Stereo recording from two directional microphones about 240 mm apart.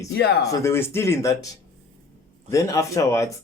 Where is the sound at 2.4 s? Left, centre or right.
Centre.